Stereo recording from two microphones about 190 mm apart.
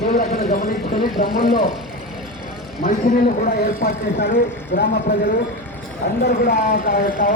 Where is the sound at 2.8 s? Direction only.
45° left (ahead or behind).